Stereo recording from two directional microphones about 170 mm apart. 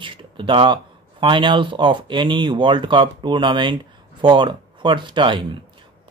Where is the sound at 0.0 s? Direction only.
30° right (ahead or behind).